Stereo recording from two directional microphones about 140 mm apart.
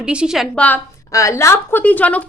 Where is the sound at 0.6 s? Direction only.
10° left (ahead or behind).